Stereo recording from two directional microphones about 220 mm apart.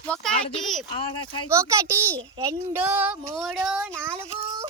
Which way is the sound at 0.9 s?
25° left (ahead or behind).